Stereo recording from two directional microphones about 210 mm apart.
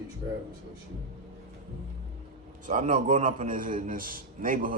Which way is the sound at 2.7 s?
35° right (ahead or behind).